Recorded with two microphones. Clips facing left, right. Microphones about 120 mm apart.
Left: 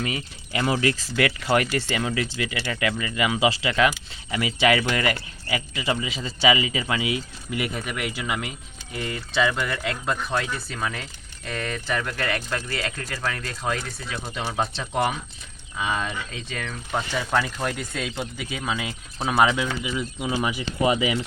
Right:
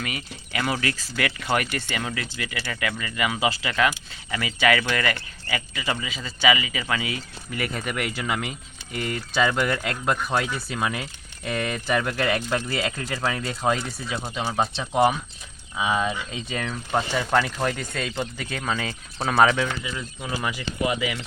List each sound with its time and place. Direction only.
0.0 s speech: 25° left (ahead or behind)
7.8 s speech: 5° left (ahead or behind); by 21.2 s 25° left (ahead or behind)